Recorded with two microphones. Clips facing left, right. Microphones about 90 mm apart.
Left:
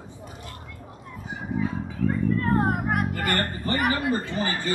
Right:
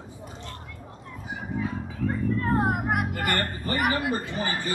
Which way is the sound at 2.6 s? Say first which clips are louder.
Left 1 dB; 10° right (ahead or behind).